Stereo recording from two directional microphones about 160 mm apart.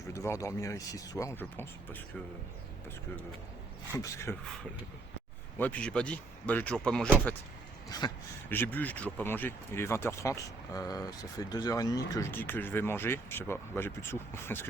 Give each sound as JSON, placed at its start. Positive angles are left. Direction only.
{"t": 0.1, "sound": "speech", "side_deg": 20}
{"t": 3.9, "sound": "speech", "side_deg": 20}
{"t": 5.5, "sound": "speech", "side_deg": 10}
{"t": 7.9, "sound": "speech", "side_deg": 25}
{"t": 8.4, "sound": "speech", "side_deg": 10}